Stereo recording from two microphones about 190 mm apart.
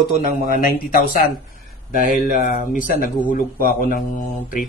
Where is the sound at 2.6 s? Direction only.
45° left (ahead or behind).